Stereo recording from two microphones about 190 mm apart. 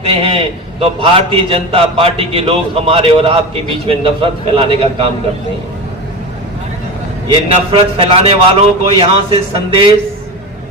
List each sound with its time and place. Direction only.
0.2 s a man's voice: 30° right (ahead or behind)
7.3 s a man's voice: 25° right (ahead or behind)